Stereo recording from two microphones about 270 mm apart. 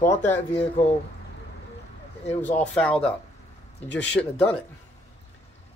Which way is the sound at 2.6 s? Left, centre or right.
Centre.